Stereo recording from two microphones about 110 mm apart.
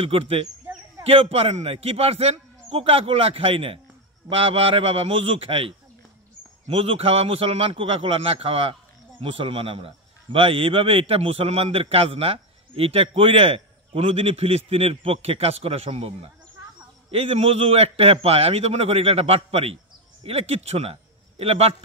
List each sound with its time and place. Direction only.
0.0 s a man's voice: 60° right (ahead or behind)